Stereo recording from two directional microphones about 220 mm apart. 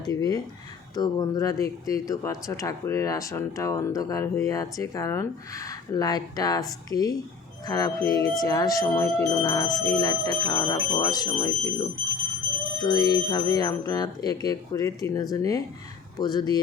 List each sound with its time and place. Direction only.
0.0 s speech: 15° left (ahead or behind)